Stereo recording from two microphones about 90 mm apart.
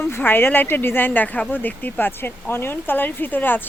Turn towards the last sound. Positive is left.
turn(degrees=20)  # may be behind; listen again after turning